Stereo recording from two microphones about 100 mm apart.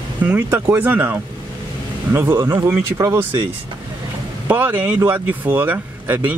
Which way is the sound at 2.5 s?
25° right (ahead or behind).